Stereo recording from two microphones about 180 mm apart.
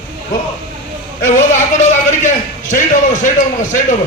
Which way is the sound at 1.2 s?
45° left (ahead or behind).